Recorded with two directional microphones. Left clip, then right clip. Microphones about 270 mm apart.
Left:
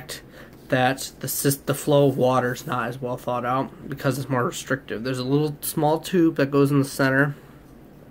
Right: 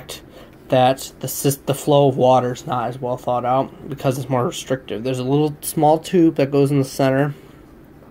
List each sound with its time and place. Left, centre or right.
0.7 s speech: centre